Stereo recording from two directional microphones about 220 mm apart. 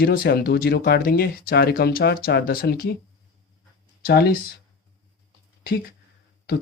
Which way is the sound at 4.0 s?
45° left (ahead or behind).